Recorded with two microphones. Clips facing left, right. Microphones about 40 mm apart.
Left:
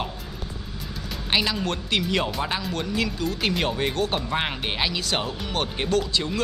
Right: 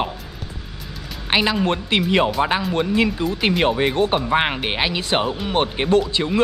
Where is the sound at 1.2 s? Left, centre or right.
Right.